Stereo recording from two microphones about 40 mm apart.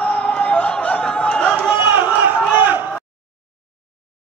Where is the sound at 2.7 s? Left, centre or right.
Right.